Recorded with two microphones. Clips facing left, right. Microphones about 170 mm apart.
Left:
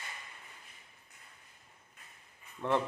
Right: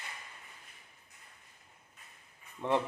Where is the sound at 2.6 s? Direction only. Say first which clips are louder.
Even; 15° right (ahead or behind).